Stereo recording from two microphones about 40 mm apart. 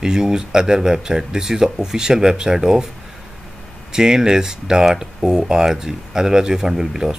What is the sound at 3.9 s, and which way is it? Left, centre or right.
Speech, centre.